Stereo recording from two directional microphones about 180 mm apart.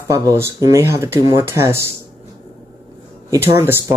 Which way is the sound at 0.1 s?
20° right (ahead or behind).